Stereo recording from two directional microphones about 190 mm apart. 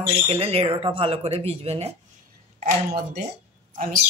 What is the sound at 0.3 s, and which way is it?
Speech, 30° right (ahead or behind).